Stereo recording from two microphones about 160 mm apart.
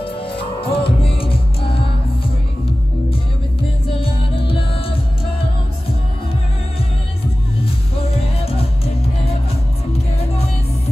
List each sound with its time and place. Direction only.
0.0 s music: 35° left (ahead or behind)
4.0 s music: 35° left (ahead or behind)
7.9 s music: 40° left (ahead or behind)